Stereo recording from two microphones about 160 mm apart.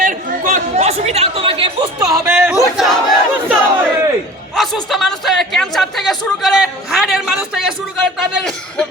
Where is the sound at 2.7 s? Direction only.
Centre (ahead or behind).